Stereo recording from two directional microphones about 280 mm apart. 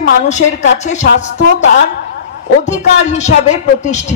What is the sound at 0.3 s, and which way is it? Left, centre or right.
A woman's voice, left.